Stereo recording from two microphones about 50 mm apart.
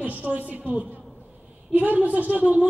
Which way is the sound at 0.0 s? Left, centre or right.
Right.